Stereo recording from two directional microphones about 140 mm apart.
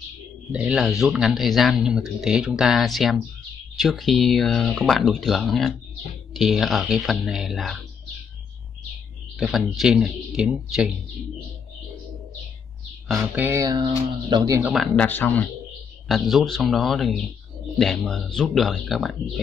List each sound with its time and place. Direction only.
0.5 s speech: 10° right (ahead or behind)
9.4 s speech: centre (ahead or behind)
13.1 s speech: 10° right (ahead or behind)
13.6 s speech: 30° right (ahead or behind)
14.8 s speech: 10° left (ahead or behind)
16.1 s speech: centre (ahead or behind)